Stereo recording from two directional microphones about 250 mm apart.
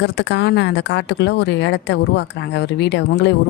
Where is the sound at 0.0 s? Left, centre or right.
Left.